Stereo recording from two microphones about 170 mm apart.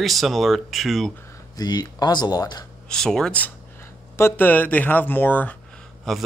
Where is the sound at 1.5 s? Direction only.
25° left (ahead or behind).